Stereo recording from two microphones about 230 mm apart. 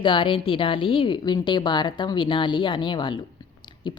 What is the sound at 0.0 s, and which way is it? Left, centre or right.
A woman's voice, left.